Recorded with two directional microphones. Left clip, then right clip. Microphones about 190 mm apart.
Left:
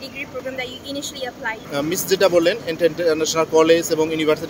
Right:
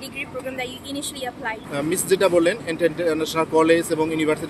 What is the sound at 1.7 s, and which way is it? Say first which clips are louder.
Speech: even; 15° left (ahead or behind).